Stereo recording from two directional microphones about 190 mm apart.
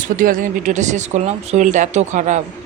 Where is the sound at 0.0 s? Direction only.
45° right (ahead or behind).